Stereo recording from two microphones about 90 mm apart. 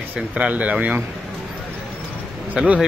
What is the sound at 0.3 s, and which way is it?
Speech, 15° right (ahead or behind).